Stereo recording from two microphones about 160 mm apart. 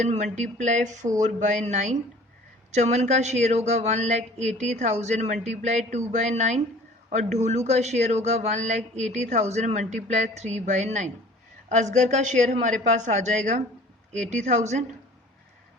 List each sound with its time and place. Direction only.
0.0 s speech: 45° right (ahead or behind)